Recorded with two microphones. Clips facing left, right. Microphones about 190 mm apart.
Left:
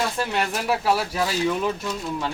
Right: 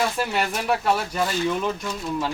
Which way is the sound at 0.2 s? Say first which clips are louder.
Even; centre (ahead or behind).